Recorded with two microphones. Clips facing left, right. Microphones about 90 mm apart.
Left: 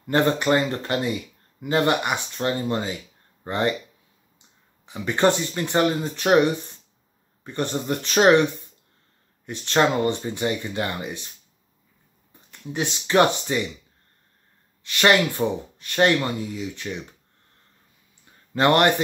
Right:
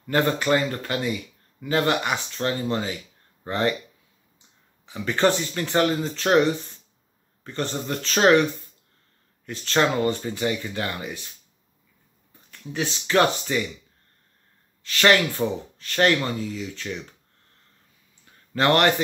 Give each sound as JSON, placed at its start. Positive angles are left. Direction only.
{"t": 0.0, "sound": "speech", "side_deg": 25}
{"t": 1.6, "sound": "speech", "side_deg": 20}
{"t": 4.9, "sound": "speech", "side_deg": 15}
{"t": 7.4, "sound": "speech", "side_deg": 15}
{"t": 9.5, "sound": "speech", "side_deg": 20}
{"t": 12.4, "sound": "speech", "side_deg": 20}
{"t": 14.8, "sound": "speech", "side_deg": 15}
{"t": 18.5, "sound": "speech", "side_deg": 20}